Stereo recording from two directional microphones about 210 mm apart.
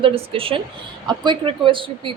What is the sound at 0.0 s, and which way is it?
A woman's voice, 25° right (ahead or behind).